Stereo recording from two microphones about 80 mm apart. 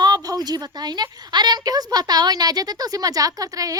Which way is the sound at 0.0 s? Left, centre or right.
Right.